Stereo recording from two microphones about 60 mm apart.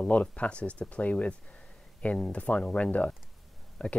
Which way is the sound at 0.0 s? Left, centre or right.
Centre.